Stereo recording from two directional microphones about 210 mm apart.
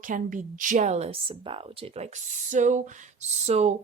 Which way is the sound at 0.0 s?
40° right (ahead or behind).